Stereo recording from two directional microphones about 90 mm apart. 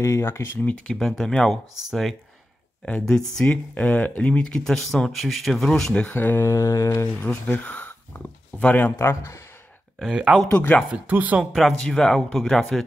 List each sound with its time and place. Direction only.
0.0 s speech: 30° left (ahead or behind)
0.7 s speech: 5° left (ahead or behind)
6.1 s mantra: 25° left (ahead or behind)
7.2 s speech: 20° left (ahead or behind)
9.9 s speech: 10° right (ahead or behind)
10.5 s speech: 25° left (ahead or behind)
11.1 s speech: 15° right (ahead or behind)
11.5 s speech: 5° left (ahead or behind)